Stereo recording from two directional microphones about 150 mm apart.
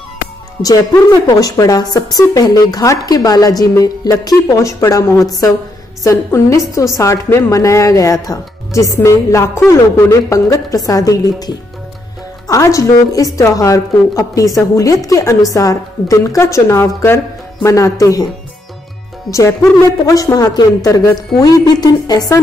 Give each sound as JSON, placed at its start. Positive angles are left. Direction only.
{"t": 1.2, "sound": "a woman's voice", "side_deg": 25}
{"t": 19.3, "sound": "a woman's voice", "side_deg": 20}